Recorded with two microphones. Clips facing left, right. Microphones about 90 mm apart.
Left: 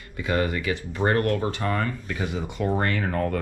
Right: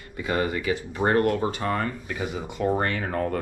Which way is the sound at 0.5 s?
20° right (ahead or behind).